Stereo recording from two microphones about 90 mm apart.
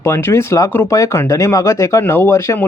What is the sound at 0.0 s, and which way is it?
Speech, 30° left (ahead or behind).